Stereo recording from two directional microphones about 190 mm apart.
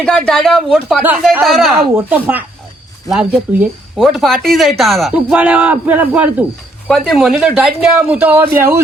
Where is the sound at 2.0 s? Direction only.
10° right (ahead or behind).